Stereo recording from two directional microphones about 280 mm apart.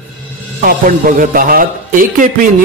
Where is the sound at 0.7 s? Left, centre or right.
Right.